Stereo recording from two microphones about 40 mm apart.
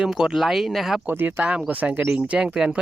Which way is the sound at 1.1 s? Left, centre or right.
Right.